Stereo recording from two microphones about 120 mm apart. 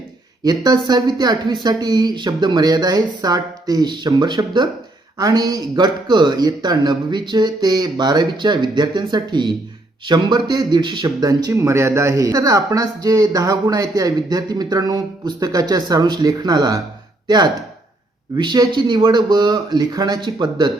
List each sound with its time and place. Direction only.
0.4 s speech: 35° right (ahead or behind)